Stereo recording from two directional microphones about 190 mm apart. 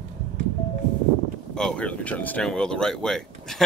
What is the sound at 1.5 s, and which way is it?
Speech, 5° left (ahead or behind).